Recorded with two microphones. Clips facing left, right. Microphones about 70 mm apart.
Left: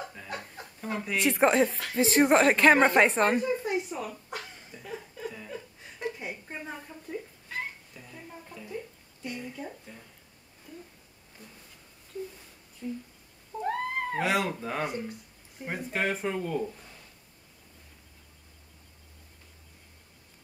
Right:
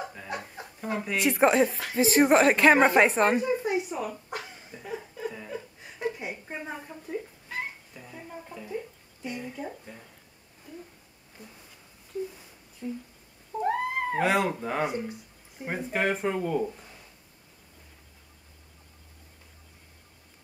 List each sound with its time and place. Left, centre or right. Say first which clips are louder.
0.0 s chuckle: right 3 dB; centre
10.7 s a sound: right 2 dB; centre
12.8 s speech: right 1 dB; centre
13.6 s cat: right 3 dB; centre
15.6 s speech: right 3 dB; centre